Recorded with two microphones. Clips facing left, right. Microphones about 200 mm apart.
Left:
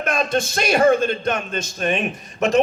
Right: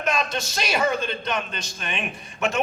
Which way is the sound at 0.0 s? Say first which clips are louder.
Left 5 dB; 50° left (ahead or behind).